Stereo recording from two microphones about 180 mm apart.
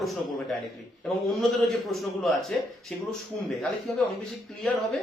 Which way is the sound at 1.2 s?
Centre (ahead or behind).